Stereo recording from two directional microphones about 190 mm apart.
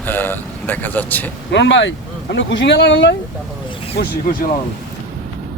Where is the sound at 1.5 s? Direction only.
75° left (ahead or behind).